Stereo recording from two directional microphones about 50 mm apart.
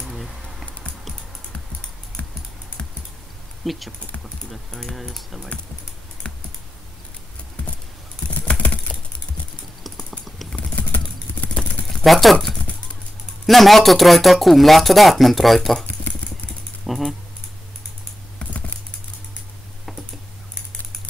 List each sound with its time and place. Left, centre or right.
0.0 s typing: centre
2.2 s typing: left
3.6 s speech: centre
4.6 s speech: centre
6.2 s computer keyboard: centre
10.5 s typing: left
11.5 s vehicle: centre
13.5 s speech: centre
16.8 s music: centre
18.4 s a sound: left